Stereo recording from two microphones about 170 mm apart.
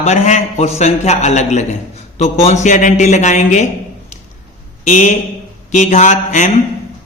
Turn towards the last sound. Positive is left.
turn(degrees=45)  # may be behind; listen again after turning